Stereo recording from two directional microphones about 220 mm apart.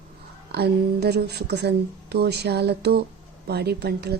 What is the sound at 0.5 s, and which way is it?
A woman's voice, 45° right (ahead or behind).